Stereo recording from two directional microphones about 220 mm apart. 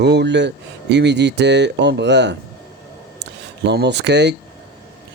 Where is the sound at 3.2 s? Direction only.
50° right (ahead or behind).